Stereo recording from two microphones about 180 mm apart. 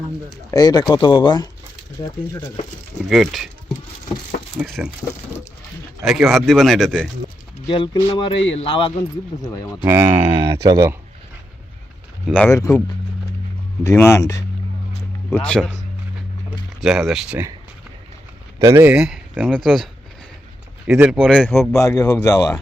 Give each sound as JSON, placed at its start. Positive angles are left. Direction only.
{"t": 0.5, "sound": "speech", "side_deg": 20}
{"t": 3.1, "sound": "speech", "side_deg": 0}
{"t": 4.6, "sound": "speech", "side_deg": 0}
{"t": 6.1, "sound": "speech", "side_deg": 0}
{"t": 7.7, "sound": "speech", "side_deg": 30}
{"t": 9.6, "sound": "speech", "side_deg": 20}
{"t": 9.8, "sound": "speech", "side_deg": -15}
{"t": 12.2, "sound": "speech", "side_deg": 5}
{"t": 12.5, "sound": "speech", "side_deg": 20}
{"t": 13.8, "sound": "speech", "side_deg": 15}
{"t": 15.3, "sound": "speech", "side_deg": 5}
{"t": 16.8, "sound": "speech", "side_deg": 0}
{"t": 18.6, "sound": "speech", "side_deg": -15}
{"t": 21.7, "sound": "speech", "side_deg": 20}